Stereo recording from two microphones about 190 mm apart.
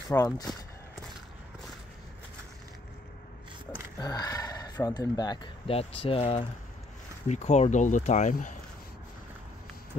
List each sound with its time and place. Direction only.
0.1 s speech: 15° left (ahead or behind)
4.0 s speech: 20° left (ahead or behind); by 8.5 s 40° left (ahead or behind)